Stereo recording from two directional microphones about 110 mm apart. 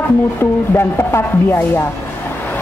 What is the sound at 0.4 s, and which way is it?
A woman's voice, 20° left (ahead or behind).